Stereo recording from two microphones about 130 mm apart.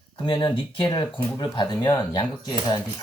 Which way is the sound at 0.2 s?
35° left (ahead or behind).